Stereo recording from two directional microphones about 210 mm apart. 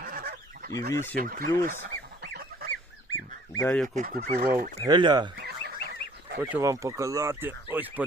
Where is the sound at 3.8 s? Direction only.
40° right (ahead or behind).